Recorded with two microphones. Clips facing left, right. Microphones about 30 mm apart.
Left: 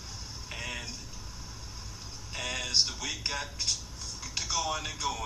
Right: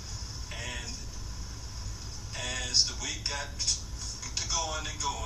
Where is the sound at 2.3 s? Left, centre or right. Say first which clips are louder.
Left 1 dB; left.